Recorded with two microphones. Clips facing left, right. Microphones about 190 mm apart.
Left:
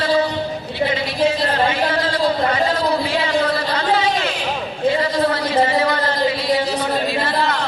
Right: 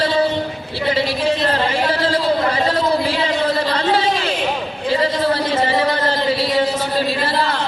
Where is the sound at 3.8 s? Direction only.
30° right (ahead or behind).